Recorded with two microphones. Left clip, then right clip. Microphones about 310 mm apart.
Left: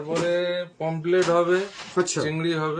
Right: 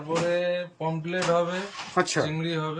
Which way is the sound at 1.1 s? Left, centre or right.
Centre.